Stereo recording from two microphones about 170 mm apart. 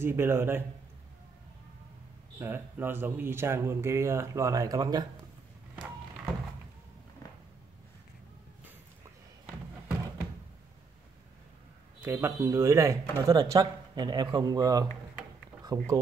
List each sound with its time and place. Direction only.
0.0 s speech: 15° right (ahead or behind)
2.4 s speech: 15° right (ahead or behind)
12.0 s speech: 15° right (ahead or behind)